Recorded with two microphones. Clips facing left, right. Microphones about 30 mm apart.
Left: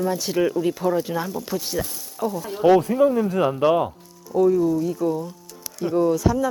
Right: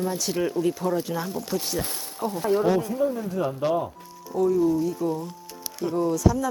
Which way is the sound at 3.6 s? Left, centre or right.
Left.